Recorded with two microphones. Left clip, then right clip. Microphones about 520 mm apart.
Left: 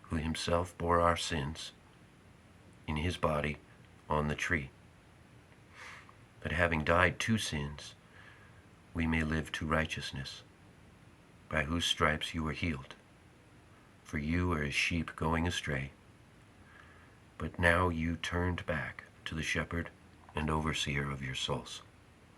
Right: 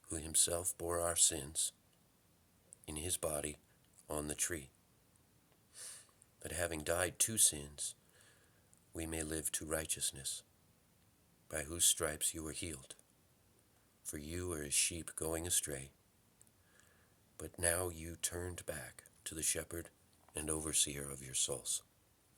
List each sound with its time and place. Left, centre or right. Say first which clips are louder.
0.1 s speech: left 6 dB; right
2.8 s speech: left 8 dB; right
5.7 s a sound: left 7 dB; right
6.4 s speech: left 10 dB; right
9.0 s speech: left 8 dB; right
11.4 s speech: left 6 dB; right
14.1 s speech: left 9 dB; right
17.3 s speech: left 10 dB; right